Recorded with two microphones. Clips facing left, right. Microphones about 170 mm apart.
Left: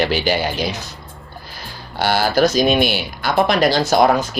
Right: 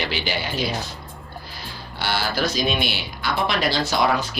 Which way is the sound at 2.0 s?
45° left (ahead or behind).